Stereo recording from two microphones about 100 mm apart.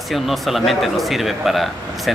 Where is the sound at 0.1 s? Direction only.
Centre (ahead or behind).